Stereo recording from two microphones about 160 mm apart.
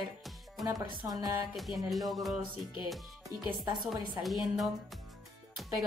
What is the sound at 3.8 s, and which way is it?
Speech, centre (ahead or behind).